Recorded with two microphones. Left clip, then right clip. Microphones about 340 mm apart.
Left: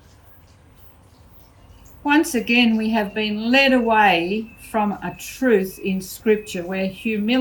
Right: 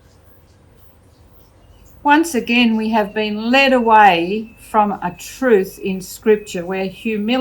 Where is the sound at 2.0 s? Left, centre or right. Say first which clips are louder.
Right 4 dB; centre.